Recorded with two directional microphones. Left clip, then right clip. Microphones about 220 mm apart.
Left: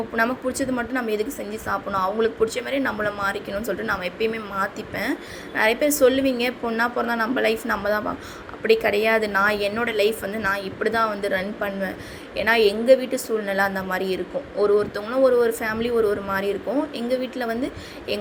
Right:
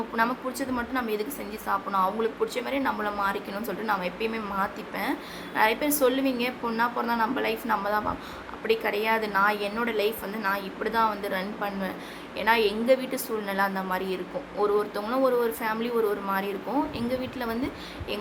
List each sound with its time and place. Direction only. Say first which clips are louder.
0.2 s a woman's voice: left 4 dB; 15° left (ahead or behind)